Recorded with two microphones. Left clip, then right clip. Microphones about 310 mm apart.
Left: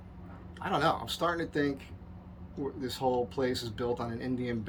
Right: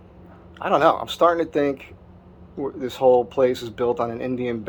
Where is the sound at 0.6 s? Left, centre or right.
Centre.